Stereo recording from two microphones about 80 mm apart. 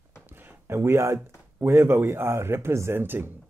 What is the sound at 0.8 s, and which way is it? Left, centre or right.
Speech, right.